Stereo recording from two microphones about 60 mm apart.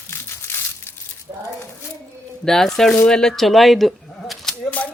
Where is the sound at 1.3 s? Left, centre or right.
Right.